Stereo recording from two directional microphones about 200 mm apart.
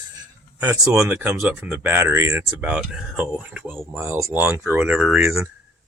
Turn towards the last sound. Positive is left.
turn(degrees=-5)  # may be behind; listen again after turning